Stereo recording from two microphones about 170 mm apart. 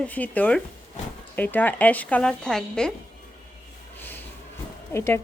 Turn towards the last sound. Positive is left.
turn(degrees=15)  # may be behind; listen again after turning